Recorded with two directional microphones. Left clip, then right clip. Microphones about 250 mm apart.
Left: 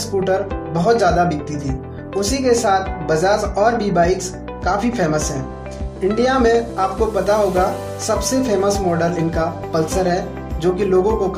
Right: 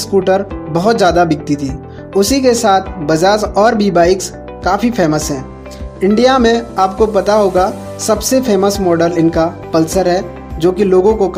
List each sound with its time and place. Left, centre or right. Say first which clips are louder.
0.0 s speech: right 6 dB; right